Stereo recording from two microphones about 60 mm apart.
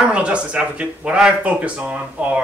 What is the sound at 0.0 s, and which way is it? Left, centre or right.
Speech, centre.